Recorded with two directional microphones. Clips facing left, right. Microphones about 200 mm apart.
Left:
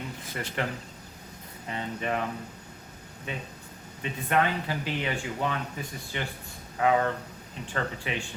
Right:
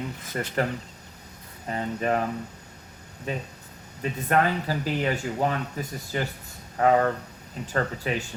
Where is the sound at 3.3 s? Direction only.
40° right (ahead or behind).